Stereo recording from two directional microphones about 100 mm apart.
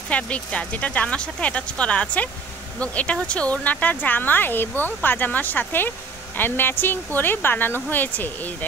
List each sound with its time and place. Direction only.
0.1 s speech: 10° left (ahead or behind)